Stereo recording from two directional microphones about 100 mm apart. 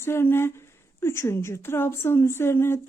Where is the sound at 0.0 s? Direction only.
25° left (ahead or behind).